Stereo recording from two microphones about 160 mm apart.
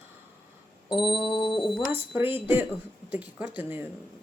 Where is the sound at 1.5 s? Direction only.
Centre (ahead or behind).